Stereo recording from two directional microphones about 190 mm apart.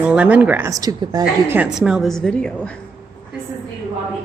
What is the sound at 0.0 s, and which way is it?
A woman's voice, 5° right (ahead or behind).